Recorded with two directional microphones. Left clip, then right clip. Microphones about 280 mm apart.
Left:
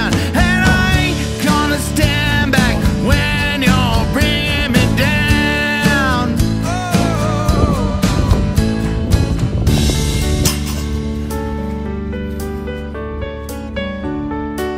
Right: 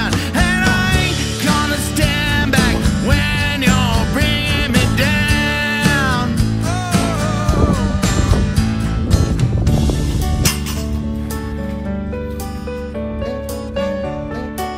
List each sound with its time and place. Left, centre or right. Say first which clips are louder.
0.0 s music: left 2 dB; centre